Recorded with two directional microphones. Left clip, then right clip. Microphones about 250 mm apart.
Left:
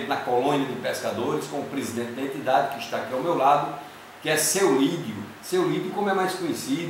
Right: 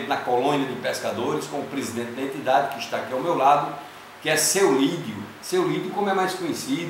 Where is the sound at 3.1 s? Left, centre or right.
Centre.